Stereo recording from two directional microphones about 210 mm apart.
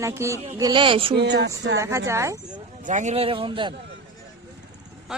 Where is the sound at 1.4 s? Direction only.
55° right (ahead or behind).